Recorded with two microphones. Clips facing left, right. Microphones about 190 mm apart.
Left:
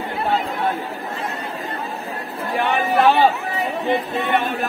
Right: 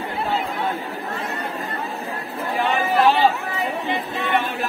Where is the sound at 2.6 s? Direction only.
60° left (ahead or behind).